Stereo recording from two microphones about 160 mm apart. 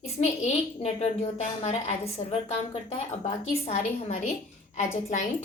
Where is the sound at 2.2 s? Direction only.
35° left (ahead or behind).